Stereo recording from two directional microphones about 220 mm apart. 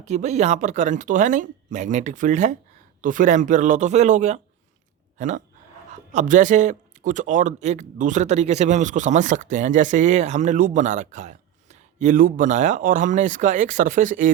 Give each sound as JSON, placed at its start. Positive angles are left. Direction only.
{"t": 0.0, "sound": "speech", "side_deg": -30}